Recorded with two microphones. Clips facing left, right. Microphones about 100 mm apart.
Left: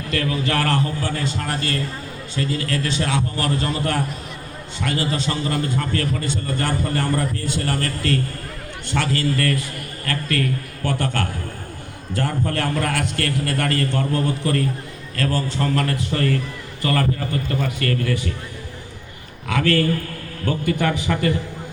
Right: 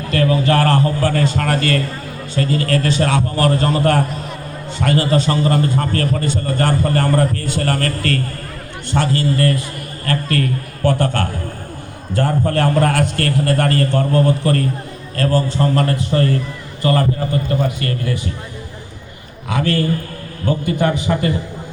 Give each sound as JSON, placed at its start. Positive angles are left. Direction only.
{"t": 0.1, "sound": "a man's voice", "side_deg": -40}
{"t": 2.3, "sound": "a man's voice", "side_deg": -50}
{"t": 8.9, "sound": "a man's voice", "side_deg": -35}
{"t": 19.5, "sound": "a man's voice", "side_deg": -20}